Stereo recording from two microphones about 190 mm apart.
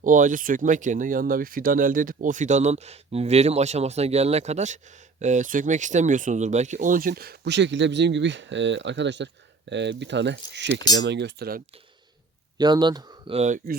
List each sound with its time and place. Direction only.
0.0 s speech: 45° right (ahead or behind)
12.5 s speech: 20° right (ahead or behind)